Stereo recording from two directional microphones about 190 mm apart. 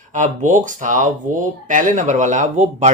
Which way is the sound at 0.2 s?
40° right (ahead or behind).